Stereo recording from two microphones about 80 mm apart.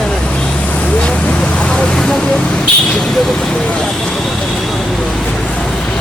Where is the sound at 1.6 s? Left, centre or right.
Centre.